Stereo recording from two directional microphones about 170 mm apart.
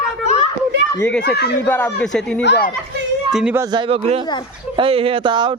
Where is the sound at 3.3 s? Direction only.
5° right (ahead or behind).